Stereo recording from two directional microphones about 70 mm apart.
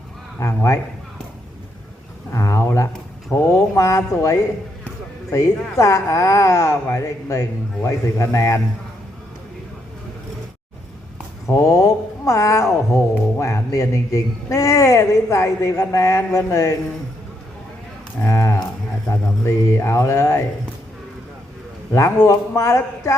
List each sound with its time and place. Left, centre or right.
0.3 s a man's voice: left
2.3 s a man's voice: left
11.4 s a man's voice: left
18.2 s a man's voice: left
21.9 s a man's voice: left